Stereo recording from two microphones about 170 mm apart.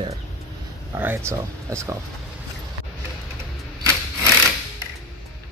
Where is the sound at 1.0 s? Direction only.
15° right (ahead or behind).